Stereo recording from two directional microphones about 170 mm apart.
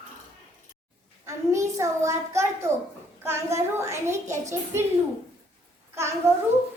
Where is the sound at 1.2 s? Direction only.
15° right (ahead or behind).